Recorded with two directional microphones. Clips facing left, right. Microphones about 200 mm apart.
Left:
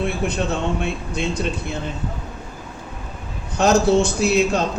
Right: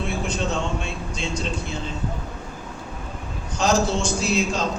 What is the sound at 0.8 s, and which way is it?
Speech, 60° left (ahead or behind).